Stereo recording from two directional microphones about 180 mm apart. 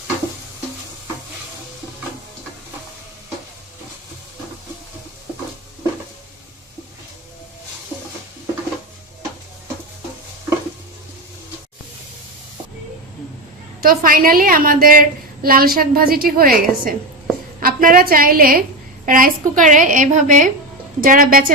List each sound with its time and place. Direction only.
13.8 s a woman's voice: 50° right (ahead or behind)